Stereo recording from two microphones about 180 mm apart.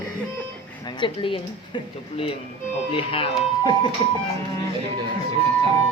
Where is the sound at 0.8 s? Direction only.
25° left (ahead or behind).